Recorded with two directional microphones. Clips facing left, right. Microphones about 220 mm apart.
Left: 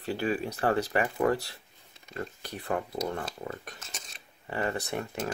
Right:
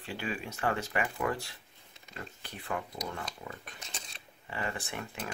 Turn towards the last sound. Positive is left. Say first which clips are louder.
# left 7 dB
turn(degrees=45)  # may be behind; listen again after turning